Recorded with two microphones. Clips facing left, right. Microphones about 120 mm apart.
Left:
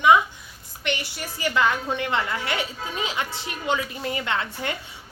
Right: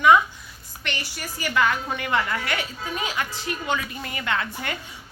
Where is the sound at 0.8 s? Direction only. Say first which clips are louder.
Left 4 dB; 20° left (ahead or behind).